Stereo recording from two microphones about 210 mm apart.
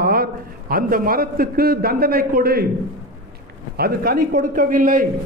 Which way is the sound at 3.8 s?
45° right (ahead or behind).